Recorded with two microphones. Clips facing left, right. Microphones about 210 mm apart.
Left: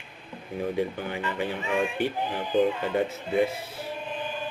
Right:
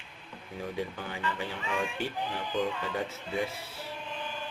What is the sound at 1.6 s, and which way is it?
Speech, 20° left (ahead or behind).